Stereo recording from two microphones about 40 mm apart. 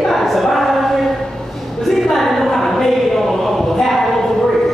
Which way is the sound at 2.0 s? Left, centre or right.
Centre.